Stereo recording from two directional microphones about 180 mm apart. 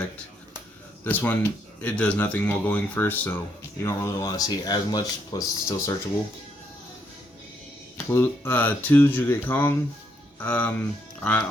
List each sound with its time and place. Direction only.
1.0 s speech: 10° left (ahead or behind)
7.9 s speech: 10° left (ahead or behind)